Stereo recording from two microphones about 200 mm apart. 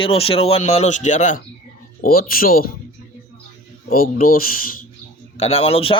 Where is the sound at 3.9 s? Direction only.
45° left (ahead or behind).